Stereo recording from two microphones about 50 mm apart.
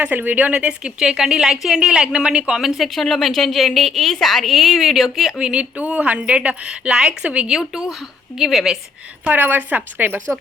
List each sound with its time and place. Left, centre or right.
0.0 s a woman's voice: right; by 5.3 s centre
5.4 s speech: right
7.5 s a woman's voice: centre
9.3 s a woman's voice: right